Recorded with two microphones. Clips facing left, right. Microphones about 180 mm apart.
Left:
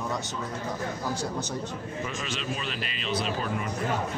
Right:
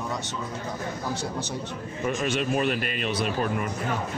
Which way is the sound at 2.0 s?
55° right (ahead or behind).